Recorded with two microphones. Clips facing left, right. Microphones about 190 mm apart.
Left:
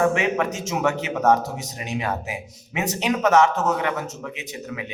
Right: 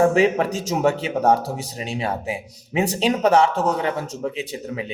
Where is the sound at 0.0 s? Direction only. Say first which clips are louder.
Right 4 dB; 35° right (ahead or behind).